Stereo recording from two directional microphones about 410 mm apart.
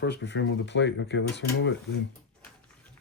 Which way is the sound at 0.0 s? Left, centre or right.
Left.